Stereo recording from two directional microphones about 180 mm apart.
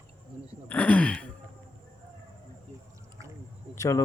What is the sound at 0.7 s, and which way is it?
Speech, 10° left (ahead or behind).